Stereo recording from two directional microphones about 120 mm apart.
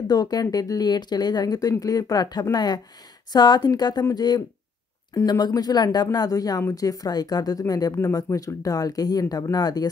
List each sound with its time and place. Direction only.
0.1 s speech: 35° left (ahead or behind)